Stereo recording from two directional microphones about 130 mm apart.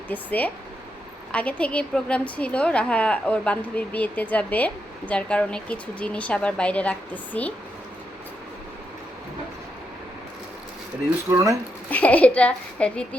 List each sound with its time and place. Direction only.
0.1 s a woman's voice: 10° left (ahead or behind)
11.3 s speech: 20° right (ahead or behind)
11.9 s a woman's voice: 10° left (ahead or behind)